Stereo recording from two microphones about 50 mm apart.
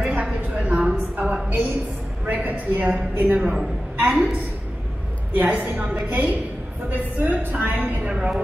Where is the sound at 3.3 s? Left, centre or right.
Right.